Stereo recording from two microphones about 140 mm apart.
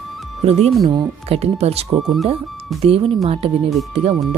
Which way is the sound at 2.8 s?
45° right (ahead or behind).